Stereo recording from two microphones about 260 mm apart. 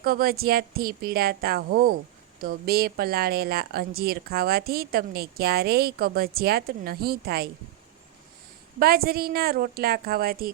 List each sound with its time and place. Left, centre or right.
0.0 s speech: right
8.8 s speech: right